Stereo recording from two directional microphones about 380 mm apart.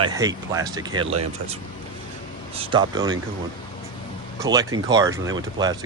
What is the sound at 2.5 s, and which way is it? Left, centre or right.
Speech, centre.